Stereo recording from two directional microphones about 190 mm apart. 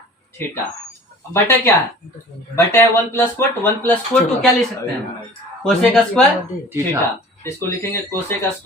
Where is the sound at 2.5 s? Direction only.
15° left (ahead or behind).